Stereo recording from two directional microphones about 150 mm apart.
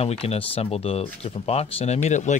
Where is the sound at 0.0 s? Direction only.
45° left (ahead or behind).